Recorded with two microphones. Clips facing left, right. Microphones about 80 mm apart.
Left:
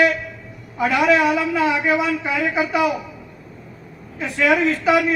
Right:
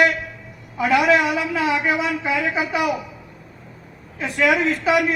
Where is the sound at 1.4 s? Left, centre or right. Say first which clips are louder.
Left 2 dB; left.